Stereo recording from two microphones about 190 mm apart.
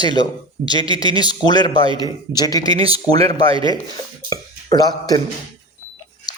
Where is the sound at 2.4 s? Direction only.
20° left (ahead or behind).